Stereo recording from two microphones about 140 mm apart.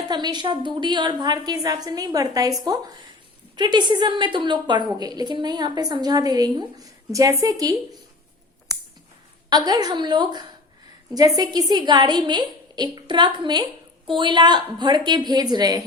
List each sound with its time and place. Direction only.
0.1 s a woman's voice: 30° right (ahead or behind)
9.5 s a woman's voice: 30° right (ahead or behind)